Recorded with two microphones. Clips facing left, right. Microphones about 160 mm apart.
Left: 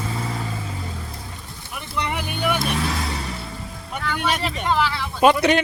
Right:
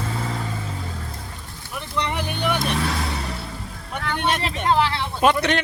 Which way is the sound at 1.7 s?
10° left (ahead or behind).